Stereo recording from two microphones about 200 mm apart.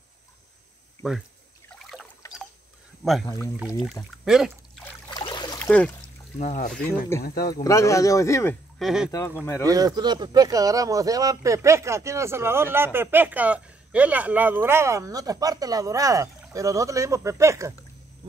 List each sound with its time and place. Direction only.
1.0 s speech: 5° right (ahead or behind)
1.7 s boat: centre (ahead or behind)
3.5 s speech: 5° right (ahead or behind)
5.1 s trickle: 20° left (ahead or behind)
5.6 s speech: 5° left (ahead or behind)
6.3 s speech: 35° left (ahead or behind)
7.2 s speech: 50° left (ahead or behind)
7.5 s speech: 15° left (ahead or behind)
8.7 s speech: centre (ahead or behind)
9.1 s speech: 15° left (ahead or behind)
9.7 s speech: 20° right (ahead or behind)